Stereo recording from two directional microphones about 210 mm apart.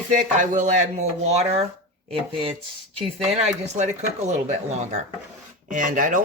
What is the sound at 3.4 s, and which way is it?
Speech, 35° right (ahead or behind).